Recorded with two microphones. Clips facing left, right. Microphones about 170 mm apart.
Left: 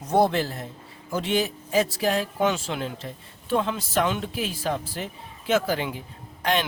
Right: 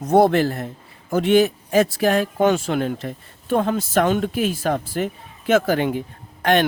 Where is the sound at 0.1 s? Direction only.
55° right (ahead or behind).